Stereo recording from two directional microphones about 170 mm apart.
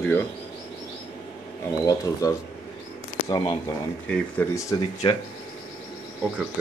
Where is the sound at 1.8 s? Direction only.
20° left (ahead or behind).